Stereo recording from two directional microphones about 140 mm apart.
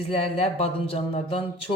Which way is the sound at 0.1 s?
45° left (ahead or behind).